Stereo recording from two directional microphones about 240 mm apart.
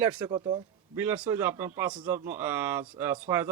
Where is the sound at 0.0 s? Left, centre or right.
Centre.